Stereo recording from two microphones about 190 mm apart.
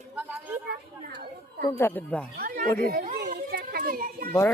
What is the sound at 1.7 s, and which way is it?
Speech, 10° left (ahead or behind).